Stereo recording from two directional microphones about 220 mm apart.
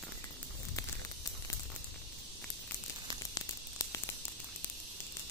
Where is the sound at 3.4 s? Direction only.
15° left (ahead or behind).